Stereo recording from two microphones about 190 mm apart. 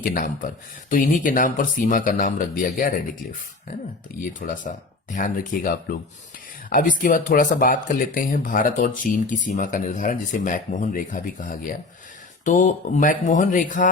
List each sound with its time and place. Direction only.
0.0 s speech: 50° left (ahead or behind)
4.4 s speech: 45° left (ahead or behind)